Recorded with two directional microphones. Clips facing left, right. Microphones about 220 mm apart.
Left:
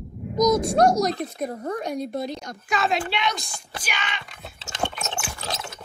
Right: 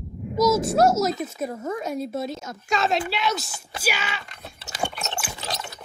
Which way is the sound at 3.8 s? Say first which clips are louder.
Right 6 dB; 5° right (ahead or behind).